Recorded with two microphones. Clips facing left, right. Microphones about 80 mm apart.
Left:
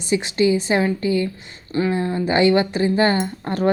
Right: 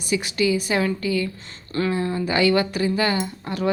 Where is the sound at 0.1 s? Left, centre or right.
Left.